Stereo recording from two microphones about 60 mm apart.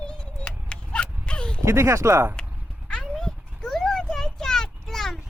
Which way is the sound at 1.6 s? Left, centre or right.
Right.